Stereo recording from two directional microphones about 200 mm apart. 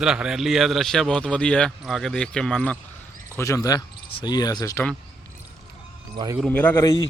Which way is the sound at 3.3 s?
15° left (ahead or behind).